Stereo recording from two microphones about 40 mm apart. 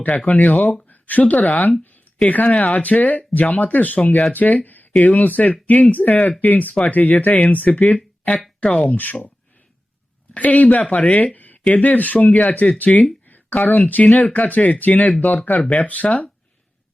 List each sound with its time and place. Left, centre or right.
0.3 s speech: left
6.1 s speech: centre
6.4 s speech: left
8.6 s speech: left
10.3 s speech: left
11.3 s a sound: left
11.7 s speech: left
13.6 s speech: left
13.8 s speech: left
15.8 s speech: left